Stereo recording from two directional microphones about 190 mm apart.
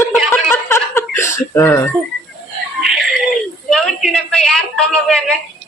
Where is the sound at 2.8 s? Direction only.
Centre (ahead or behind).